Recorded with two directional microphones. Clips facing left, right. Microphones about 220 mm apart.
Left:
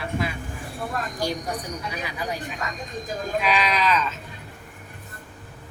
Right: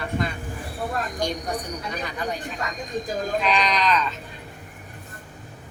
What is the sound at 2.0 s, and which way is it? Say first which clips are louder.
Speech: right 2 dB; 5° left (ahead or behind).